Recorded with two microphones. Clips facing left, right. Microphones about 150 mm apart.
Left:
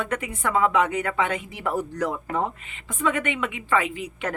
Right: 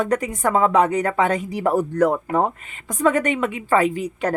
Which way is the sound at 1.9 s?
55° right (ahead or behind).